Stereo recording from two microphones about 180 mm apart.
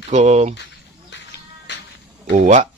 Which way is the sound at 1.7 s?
80° left.